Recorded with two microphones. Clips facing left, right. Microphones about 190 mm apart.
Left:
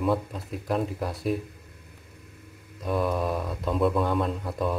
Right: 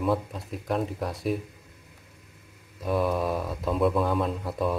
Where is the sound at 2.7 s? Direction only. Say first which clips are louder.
Right 1 dB; centre (ahead or behind).